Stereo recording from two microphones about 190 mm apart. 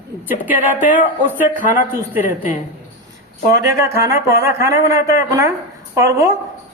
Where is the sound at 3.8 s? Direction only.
15° right (ahead or behind).